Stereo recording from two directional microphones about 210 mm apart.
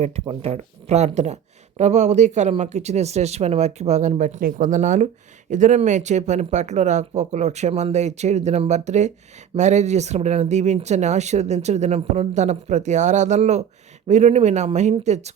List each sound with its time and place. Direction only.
0.0 s speech: 30° right (ahead or behind)